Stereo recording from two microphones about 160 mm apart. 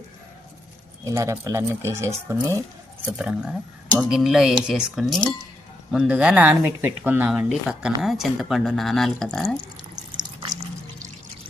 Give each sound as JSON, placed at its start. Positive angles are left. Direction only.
{"t": 1.0, "sound": "speech", "side_deg": -20}
{"t": 3.1, "sound": "speech", "side_deg": -5}